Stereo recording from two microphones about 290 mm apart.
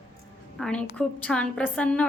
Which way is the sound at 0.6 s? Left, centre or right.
Centre.